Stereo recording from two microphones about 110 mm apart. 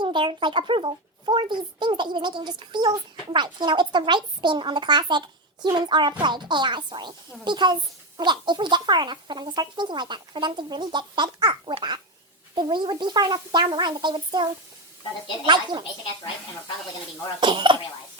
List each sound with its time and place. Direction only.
0.0 s a child's voice: 45° right (ahead or behind)
15.4 s a child's voice: 45° right (ahead or behind)
17.4 s a child's voice: 45° right (ahead or behind)